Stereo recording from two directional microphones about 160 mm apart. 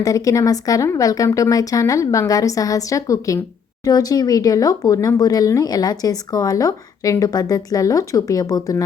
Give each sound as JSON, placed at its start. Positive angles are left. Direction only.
{"t": 0.0, "sound": "speech", "side_deg": 20}